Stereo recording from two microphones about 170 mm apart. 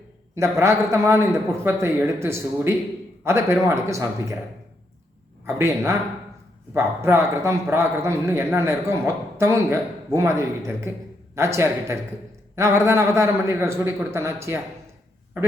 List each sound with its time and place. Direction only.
0.3 s a man's voice: 15° right (ahead or behind)
5.5 s a man's voice: 15° right (ahead or behind)